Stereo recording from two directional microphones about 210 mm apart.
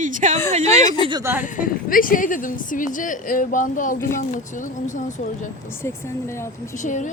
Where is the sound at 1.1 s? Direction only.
15° right (ahead or behind).